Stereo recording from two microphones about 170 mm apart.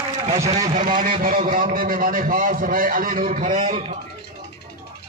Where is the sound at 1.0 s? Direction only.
55° right (ahead or behind); by 3.9 s 40° right (ahead or behind).